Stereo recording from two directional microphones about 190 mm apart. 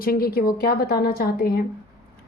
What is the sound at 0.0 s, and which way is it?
A woman's voice, 50° left (ahead or behind).